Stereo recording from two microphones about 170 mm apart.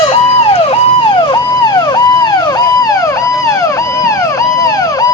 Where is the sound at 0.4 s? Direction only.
30° left (ahead or behind).